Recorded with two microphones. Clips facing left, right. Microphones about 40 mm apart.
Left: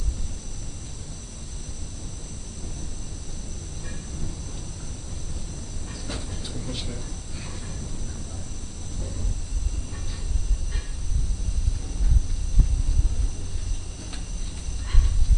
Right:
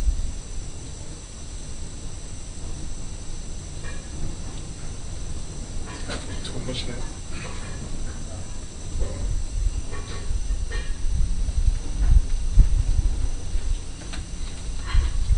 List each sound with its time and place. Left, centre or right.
5.9 s train: right